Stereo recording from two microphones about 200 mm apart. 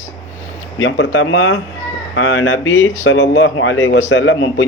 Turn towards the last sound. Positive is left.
turn(degrees=65)  # may be behind; listen again after turning